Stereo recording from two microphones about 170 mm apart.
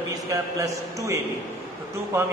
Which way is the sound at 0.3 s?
20° right (ahead or behind).